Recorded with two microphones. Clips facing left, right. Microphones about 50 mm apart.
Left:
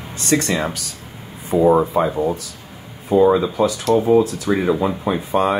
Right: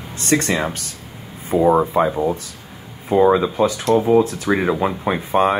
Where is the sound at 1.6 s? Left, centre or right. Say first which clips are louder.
Even; right.